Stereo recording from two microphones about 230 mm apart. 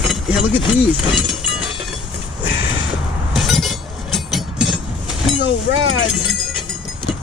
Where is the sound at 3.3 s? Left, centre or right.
Centre.